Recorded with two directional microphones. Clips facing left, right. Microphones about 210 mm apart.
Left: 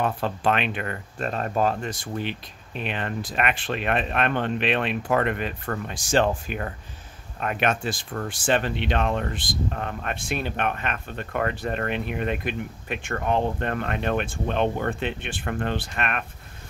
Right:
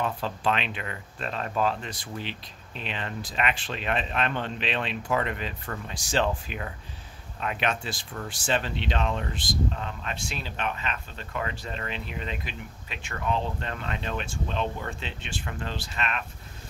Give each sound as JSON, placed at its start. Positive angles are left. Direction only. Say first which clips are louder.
{"t": 0.0, "sound": "speech", "louder": "left 4 dB", "side_deg": 55}